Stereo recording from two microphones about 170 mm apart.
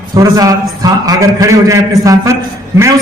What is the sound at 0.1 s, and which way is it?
A man's voice, 20° right (ahead or behind).